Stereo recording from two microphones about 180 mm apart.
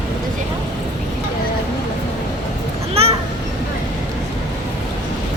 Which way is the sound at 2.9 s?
35° right (ahead or behind).